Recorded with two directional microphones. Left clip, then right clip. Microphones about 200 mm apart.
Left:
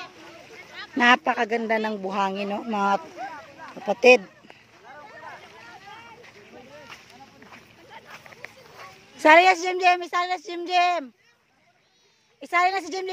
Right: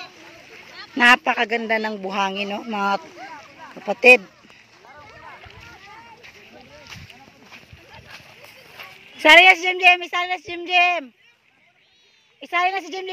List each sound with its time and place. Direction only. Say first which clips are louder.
0.9 s speech: right 4 dB; centre (ahead or behind)
4.8 s a sound: left 1 dB; 55° right (ahead or behind)
8.7 s speech: right 5 dB; centre (ahead or behind)
12.4 s speech: right 1 dB; centre (ahead or behind)